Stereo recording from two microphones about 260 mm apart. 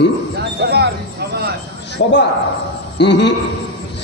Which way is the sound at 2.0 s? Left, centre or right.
Left.